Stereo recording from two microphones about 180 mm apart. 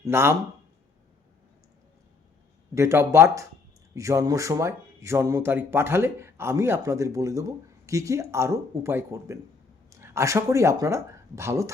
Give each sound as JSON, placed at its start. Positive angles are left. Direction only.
{"t": 0.0, "sound": "speech", "side_deg": -15}
{"t": 2.7, "sound": "speech", "side_deg": -15}